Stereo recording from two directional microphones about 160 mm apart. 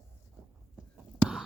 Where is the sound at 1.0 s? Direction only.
5° right (ahead or behind).